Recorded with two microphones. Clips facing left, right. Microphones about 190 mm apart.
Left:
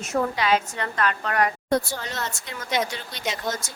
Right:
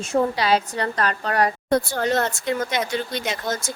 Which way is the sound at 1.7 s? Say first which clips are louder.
Right 5 dB; 55° right (ahead or behind).